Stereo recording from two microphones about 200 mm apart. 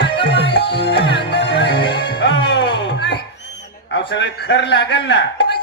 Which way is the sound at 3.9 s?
65° left (ahead or behind).